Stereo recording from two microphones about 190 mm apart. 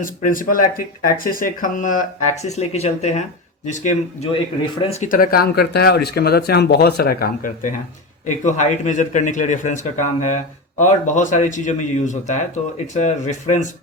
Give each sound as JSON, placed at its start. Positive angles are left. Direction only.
{"t": 0.0, "sound": "speech", "side_deg": 45}
{"t": 5.2, "sound": "speech", "side_deg": 50}